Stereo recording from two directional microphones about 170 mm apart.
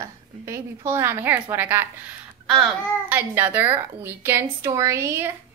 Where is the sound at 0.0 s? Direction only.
15° right (ahead or behind).